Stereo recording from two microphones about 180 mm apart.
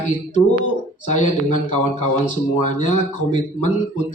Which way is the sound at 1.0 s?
40° left (ahead or behind).